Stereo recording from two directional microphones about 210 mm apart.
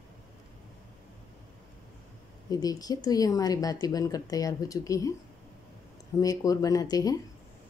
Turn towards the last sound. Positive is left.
turn(degrees=15)  # may be behind; listen again after turning